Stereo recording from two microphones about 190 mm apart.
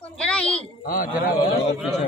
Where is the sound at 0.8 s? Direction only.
50° left (ahead or behind).